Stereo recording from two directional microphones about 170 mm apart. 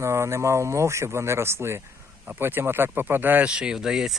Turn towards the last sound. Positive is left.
turn(degrees=-5)  # may be behind; listen again after turning